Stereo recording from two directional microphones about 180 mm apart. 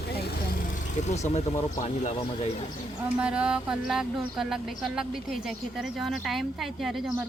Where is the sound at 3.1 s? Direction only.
5° right (ahead or behind).